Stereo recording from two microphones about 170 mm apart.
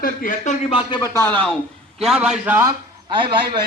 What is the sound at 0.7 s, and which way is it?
Speech, 30° left (ahead or behind).